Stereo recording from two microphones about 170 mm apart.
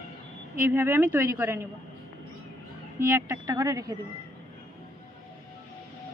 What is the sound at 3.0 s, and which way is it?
Speech, 15° right (ahead or behind).